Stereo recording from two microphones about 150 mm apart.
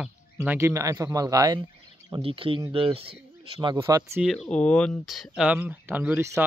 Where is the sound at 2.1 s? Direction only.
35° right (ahead or behind).